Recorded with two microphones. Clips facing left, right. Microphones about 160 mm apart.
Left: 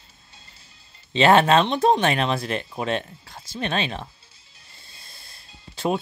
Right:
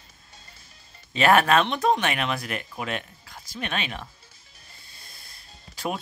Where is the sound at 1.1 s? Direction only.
25° left (ahead or behind).